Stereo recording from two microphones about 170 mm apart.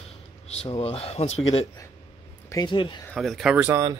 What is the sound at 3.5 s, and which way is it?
Speech, 10° right (ahead or behind).